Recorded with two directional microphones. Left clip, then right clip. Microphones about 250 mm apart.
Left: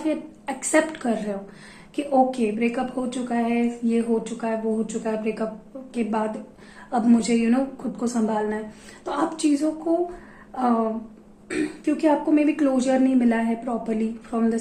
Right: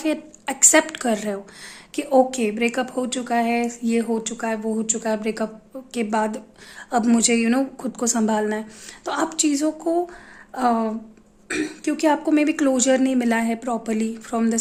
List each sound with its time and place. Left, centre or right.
0.0 s a woman's voice: right